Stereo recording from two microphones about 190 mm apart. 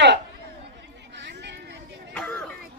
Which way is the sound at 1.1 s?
65° right (ahead or behind).